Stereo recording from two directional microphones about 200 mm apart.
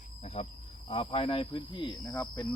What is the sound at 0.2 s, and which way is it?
Wild animals, 30° left (ahead or behind).